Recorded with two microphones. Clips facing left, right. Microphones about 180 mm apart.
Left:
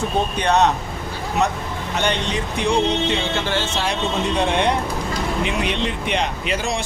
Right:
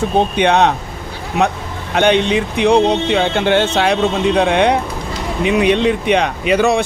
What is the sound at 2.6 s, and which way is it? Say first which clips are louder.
Speech: right 6 dB; 60° right (ahead or behind).